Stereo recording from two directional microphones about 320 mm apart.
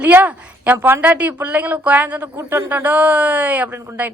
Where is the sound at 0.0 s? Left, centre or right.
Centre.